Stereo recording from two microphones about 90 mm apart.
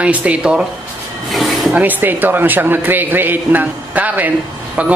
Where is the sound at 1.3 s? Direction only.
Centre (ahead or behind).